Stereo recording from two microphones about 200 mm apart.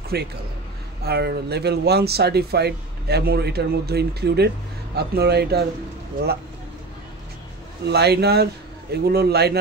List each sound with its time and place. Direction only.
0.1 s speech: 55° right (ahead or behind)
7.8 s speech: 55° right (ahead or behind)